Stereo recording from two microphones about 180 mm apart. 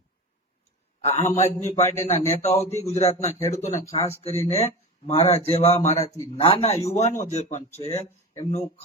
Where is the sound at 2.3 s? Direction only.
40° left (ahead or behind).